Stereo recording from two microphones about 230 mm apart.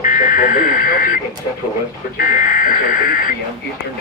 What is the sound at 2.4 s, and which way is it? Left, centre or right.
Speech, left.